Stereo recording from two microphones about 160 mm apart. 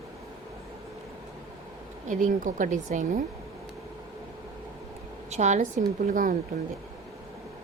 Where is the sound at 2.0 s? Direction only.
55° right (ahead or behind).